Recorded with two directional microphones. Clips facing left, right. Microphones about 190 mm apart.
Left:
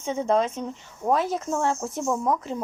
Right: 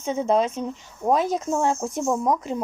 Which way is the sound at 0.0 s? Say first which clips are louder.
Right 2 dB; 10° right (ahead or behind).